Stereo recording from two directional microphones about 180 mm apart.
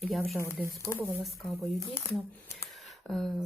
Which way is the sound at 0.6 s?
5° left (ahead or behind).